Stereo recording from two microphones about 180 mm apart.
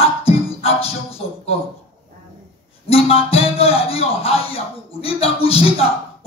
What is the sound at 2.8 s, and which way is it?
Speech, 35° left (ahead or behind).